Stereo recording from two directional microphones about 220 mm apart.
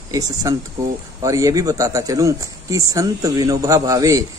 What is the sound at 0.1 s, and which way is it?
Speech, 15° right (ahead or behind).